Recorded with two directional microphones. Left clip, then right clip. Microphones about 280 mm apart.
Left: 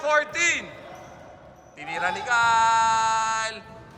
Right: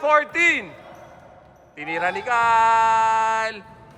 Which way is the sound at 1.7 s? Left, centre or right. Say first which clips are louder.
Right 3 dB; right.